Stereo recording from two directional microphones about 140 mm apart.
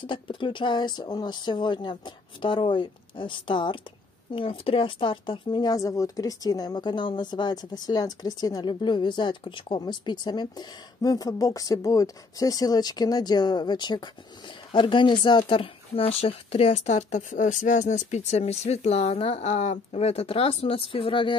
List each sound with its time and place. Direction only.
0.0 s speech: 35° left (ahead or behind)